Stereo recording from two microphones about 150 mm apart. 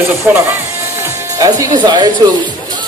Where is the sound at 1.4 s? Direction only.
25° right (ahead or behind).